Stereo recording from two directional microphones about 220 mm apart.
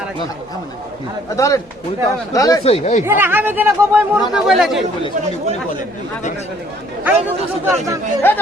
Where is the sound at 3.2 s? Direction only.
10° right (ahead or behind).